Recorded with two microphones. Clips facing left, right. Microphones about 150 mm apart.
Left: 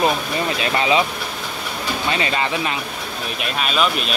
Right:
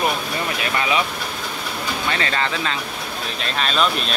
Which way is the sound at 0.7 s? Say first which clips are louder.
Left 4 dB; 25° left (ahead or behind).